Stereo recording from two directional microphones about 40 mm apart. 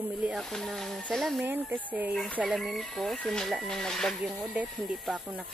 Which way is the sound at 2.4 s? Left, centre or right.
Centre.